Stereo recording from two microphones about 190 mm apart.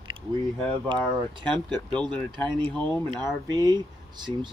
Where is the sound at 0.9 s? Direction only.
25° right (ahead or behind).